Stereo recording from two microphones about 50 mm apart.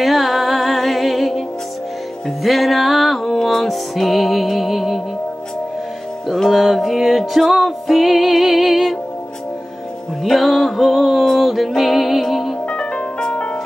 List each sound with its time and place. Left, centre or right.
0.0 s music: centre
2.4 s music: centre
6.5 s music: centre
10.2 s music: centre
12.6 s music: centre